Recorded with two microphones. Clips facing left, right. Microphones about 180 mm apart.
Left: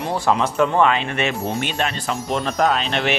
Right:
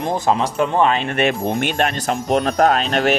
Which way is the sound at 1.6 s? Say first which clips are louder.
Right 4 dB; 55° right (ahead or behind).